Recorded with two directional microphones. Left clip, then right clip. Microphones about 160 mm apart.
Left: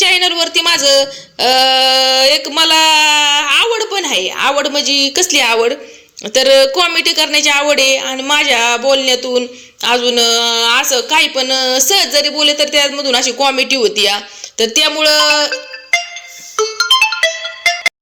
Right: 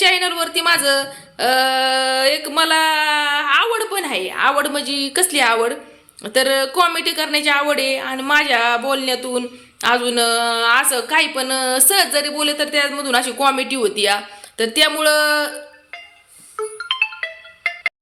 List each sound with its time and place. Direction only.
0.0 s a sound: 10° left (ahead or behind)
0.9 s speech: 10° left (ahead or behind)
16.6 s music: 70° left (ahead or behind)